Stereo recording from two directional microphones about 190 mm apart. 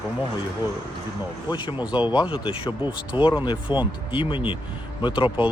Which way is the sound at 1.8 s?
10° right (ahead or behind).